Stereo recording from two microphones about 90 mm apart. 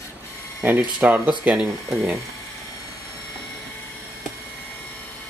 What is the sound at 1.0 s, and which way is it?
Speech, 10° right (ahead or behind).